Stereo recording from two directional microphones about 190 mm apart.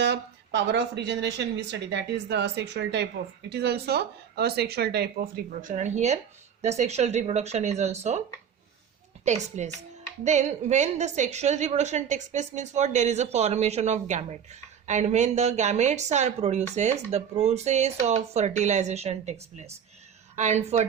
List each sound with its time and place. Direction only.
0.0 s a woman's voice: 65° right (ahead or behind); by 8.2 s 35° right (ahead or behind)
9.2 s a woman's voice: 35° right (ahead or behind)